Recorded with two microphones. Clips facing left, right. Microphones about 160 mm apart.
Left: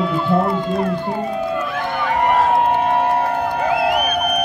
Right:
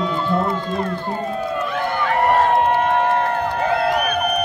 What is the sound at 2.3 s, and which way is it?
Crowd, centre (ahead or behind).